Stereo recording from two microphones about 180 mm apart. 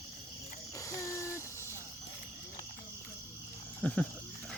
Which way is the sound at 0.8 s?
15° left (ahead or behind).